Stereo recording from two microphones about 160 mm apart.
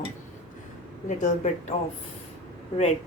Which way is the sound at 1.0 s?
50° left (ahead or behind).